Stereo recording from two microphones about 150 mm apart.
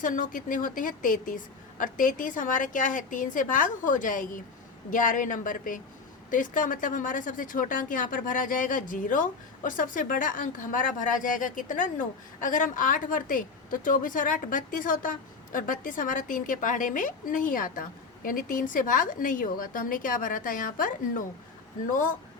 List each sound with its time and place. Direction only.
0.0 s a woman's voice: 60° left (ahead or behind)